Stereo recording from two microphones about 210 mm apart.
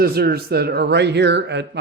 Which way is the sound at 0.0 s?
45° right (ahead or behind).